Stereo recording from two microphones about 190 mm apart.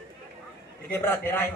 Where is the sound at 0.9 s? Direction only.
10° left (ahead or behind).